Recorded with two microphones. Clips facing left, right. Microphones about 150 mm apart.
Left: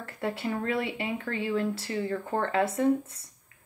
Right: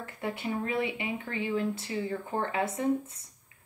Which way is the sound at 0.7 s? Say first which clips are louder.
Left 1 dB; 20° right (ahead or behind).